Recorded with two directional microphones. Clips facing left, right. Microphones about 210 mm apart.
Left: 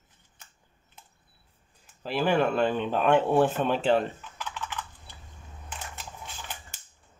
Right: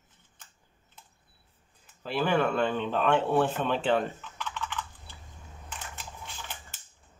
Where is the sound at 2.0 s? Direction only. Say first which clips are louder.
Left 2 dB; 50° left (ahead or behind).